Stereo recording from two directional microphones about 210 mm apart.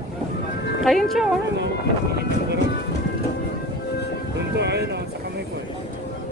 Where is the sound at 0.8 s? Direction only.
Centre (ahead or behind).